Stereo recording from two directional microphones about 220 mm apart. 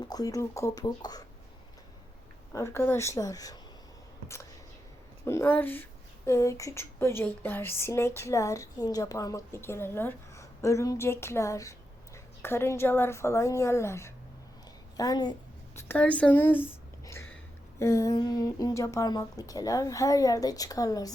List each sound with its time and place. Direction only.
0.0 s speech: 15° left (ahead or behind)
2.5 s speech: 10° left (ahead or behind)
5.2 s a woman's voice: 10° left (ahead or behind)
17.7 s speech: 15° left (ahead or behind)